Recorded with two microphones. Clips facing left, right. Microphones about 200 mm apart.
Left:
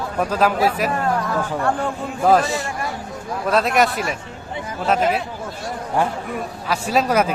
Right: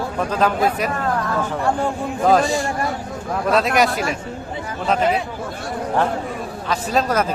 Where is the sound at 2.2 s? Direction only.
Centre (ahead or behind).